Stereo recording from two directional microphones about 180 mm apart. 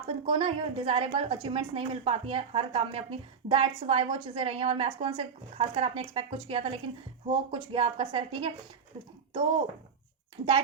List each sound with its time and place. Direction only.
0.1 s a woman's voice: 30° right (ahead or behind)